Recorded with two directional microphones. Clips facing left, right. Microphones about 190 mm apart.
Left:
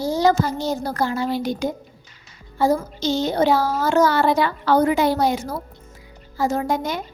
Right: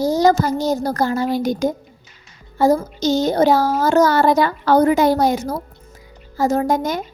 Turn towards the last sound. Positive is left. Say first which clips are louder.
# right 4 dB
turn(degrees=-45)  # may be behind; listen again after turning